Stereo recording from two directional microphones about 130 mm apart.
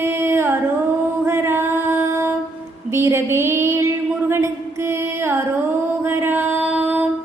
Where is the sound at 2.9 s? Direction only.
20° right (ahead or behind).